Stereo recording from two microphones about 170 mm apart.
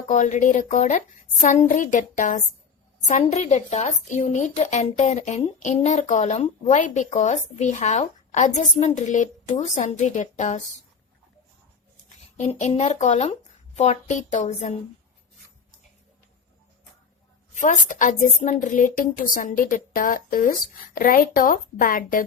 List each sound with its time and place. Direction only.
0.1 s a woman's voice: 45° left (ahead or behind)
12.0 s a woman's voice: 40° left (ahead or behind)
17.6 s a woman's voice: 50° left (ahead or behind)